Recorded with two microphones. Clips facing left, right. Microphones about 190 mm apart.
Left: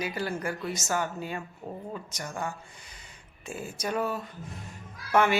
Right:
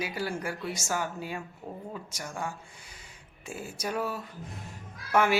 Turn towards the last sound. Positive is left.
turn(degrees=-5)  # may be behind; listen again after turning